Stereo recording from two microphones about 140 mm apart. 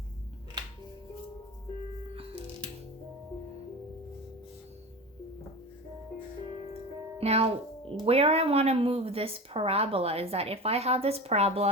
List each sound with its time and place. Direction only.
7.2 s a woman's voice: 45° right (ahead or behind)